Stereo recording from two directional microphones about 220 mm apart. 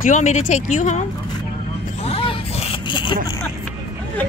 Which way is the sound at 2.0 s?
25° left (ahead or behind).